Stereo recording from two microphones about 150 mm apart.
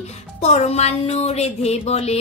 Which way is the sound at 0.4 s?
45° left (ahead or behind).